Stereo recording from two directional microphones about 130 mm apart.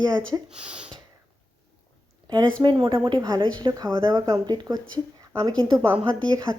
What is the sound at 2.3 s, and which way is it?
A woman's voice, 35° right (ahead or behind).